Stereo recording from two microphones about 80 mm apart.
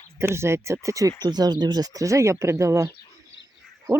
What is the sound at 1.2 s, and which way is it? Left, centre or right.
Speech, right.